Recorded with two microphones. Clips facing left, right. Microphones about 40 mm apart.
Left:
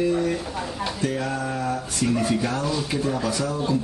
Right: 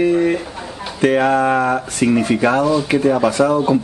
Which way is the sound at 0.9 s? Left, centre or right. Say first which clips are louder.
Right 15 dB; right.